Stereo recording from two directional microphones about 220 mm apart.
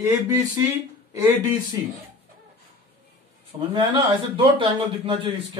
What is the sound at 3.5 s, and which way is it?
A man's voice, 25° right (ahead or behind).